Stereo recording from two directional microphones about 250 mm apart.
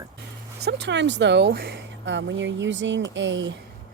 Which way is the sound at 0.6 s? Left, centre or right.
Right.